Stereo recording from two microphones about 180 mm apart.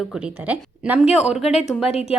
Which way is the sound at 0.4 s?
5° right (ahead or behind).